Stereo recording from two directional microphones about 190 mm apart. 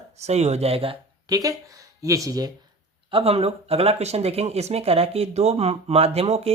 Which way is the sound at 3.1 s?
30° right (ahead or behind).